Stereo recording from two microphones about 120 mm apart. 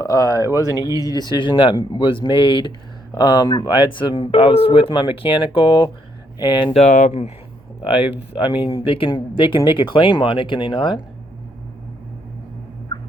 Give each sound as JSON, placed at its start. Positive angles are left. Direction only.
{"t": 0.0, "sound": "speech", "side_deg": 30}
{"t": 6.7, "sound": "speech", "side_deg": 80}
{"t": 7.8, "sound": "speech", "side_deg": 45}